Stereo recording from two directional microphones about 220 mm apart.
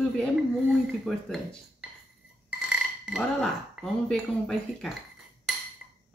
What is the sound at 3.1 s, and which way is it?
Speech, centre (ahead or behind).